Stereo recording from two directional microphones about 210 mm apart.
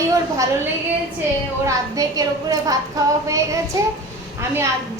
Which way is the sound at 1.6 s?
15° right (ahead or behind).